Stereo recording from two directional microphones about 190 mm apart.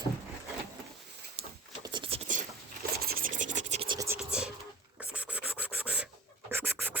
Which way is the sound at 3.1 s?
50° right (ahead or behind).